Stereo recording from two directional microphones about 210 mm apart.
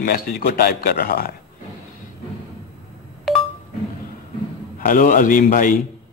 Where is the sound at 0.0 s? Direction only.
45° left (ahead or behind).